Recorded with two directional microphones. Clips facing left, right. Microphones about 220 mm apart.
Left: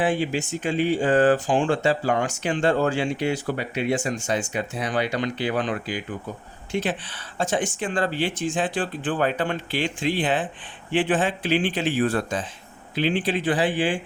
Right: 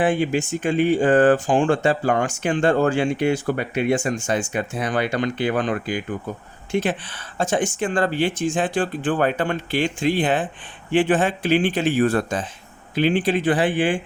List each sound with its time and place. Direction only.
0.0 s speech: 50° right (ahead or behind)